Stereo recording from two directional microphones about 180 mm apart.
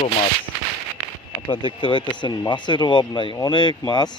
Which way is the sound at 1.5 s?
25° left (ahead or behind).